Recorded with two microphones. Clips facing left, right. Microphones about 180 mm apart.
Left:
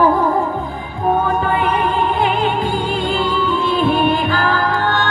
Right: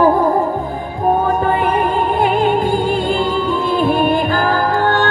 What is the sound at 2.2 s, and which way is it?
Music, 45° right (ahead or behind).